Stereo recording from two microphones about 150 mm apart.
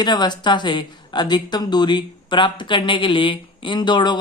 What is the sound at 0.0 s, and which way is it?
Speech, 30° left (ahead or behind).